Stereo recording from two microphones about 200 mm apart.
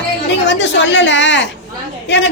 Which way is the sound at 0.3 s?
60° left (ahead or behind).